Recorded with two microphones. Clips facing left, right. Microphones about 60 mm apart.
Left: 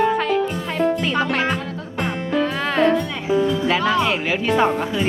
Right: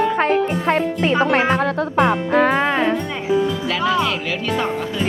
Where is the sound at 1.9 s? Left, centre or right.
Right.